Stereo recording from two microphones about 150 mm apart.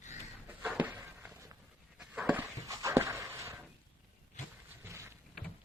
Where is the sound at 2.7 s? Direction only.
20° right (ahead or behind).